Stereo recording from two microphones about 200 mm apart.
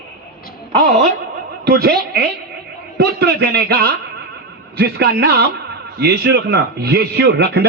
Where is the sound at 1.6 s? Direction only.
50° right (ahead or behind).